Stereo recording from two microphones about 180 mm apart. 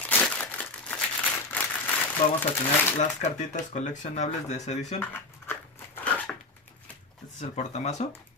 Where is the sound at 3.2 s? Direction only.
40° left (ahead or behind).